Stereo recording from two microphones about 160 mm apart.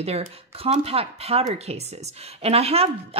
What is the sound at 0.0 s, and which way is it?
Speech, 40° right (ahead or behind).